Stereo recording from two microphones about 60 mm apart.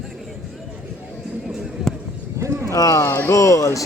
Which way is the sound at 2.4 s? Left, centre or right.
Right.